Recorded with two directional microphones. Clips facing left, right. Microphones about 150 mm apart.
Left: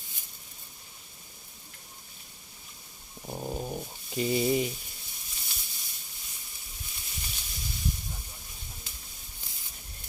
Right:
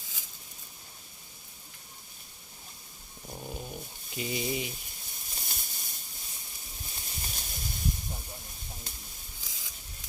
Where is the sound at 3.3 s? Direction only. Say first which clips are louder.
Left 6 dB; 35° left (ahead or behind).